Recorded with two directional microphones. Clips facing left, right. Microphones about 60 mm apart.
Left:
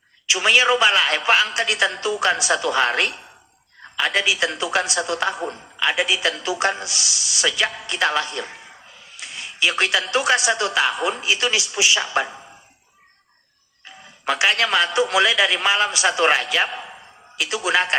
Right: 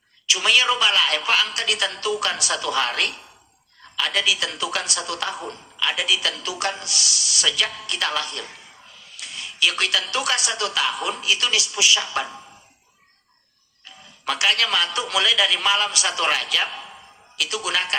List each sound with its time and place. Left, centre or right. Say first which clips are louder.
0.3 s a man's voice: left 3 dB; left
13.8 s a man's voice: left 3 dB; left